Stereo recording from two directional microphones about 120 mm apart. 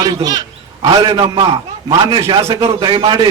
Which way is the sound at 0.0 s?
35° right (ahead or behind).